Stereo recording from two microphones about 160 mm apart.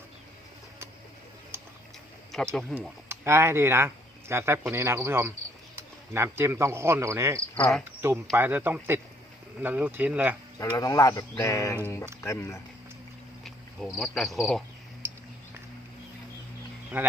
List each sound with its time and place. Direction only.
1.5 s a sound: 15° right (ahead or behind)
2.3 s speech: centre (ahead or behind)
2.7 s cricket: 5° left (ahead or behind)
3.1 s speech: 15° right (ahead or behind)
7.5 s cricket: 5° left (ahead or behind)
7.9 s speech: 15° right (ahead or behind)
10.6 s speech: 20° left (ahead or behind)
13.9 s cricket: centre (ahead or behind)
15.0 s a sound: 15° right (ahead or behind)
16.9 s speech: 10° right (ahead or behind)